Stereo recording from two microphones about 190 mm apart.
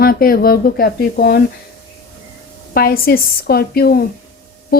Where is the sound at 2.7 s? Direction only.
50° left (ahead or behind).